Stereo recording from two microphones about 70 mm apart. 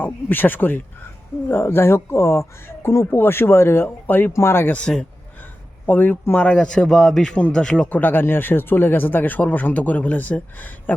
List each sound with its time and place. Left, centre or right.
0.0 s speech: left
4.3 s speech: left
4.7 s speech: centre
5.8 s a man's voice: left
6.4 s a man's voice: centre